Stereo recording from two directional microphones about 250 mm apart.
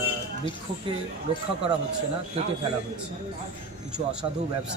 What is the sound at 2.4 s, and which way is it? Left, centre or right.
Speech, right.